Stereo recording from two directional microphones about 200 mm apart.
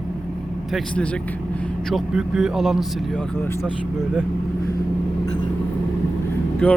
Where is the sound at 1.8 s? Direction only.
Centre (ahead or behind).